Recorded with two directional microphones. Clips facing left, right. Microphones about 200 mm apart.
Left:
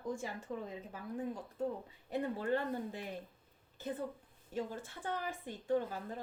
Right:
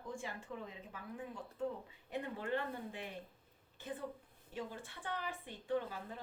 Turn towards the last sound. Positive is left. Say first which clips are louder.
# left 4 dB
turn(degrees=45)  # may be behind; listen again after turning